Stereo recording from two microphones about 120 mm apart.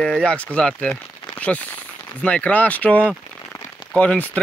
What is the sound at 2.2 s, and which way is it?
Speech, 10° left (ahead or behind).